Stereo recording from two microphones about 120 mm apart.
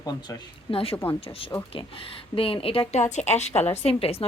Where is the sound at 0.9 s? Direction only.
20° left (ahead or behind).